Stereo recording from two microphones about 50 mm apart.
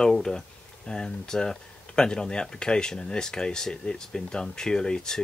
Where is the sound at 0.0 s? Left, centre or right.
Centre.